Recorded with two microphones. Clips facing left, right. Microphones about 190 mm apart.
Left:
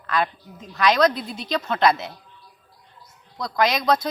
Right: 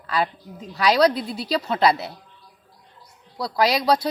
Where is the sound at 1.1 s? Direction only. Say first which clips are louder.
Right 3 dB; 35° right (ahead or behind).